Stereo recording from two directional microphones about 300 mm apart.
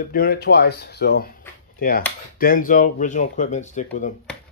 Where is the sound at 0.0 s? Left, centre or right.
Left.